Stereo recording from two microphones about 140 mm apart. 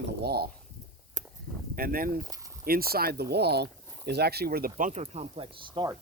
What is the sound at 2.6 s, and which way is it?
Speech, 90° right.